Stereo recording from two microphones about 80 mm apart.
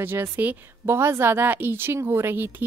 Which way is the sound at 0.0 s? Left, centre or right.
Right.